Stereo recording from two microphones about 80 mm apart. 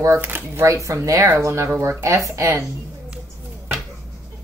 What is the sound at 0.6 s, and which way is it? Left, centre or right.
A woman's voice, right.